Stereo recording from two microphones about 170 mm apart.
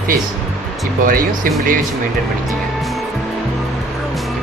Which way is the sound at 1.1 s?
55° right (ahead or behind).